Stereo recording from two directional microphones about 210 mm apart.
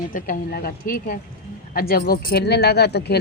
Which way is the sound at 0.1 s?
45° left (ahead or behind).